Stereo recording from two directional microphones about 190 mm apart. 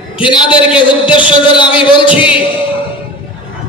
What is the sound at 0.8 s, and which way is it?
Speech, 25° left (ahead or behind).